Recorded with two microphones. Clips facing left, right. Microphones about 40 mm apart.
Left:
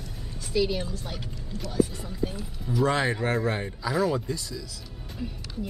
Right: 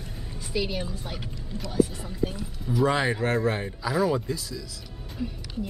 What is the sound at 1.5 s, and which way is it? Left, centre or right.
Speech, centre.